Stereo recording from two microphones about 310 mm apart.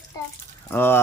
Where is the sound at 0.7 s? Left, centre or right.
Centre.